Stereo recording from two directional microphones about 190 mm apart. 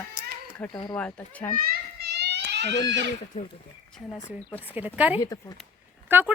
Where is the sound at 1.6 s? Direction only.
55° right (ahead or behind).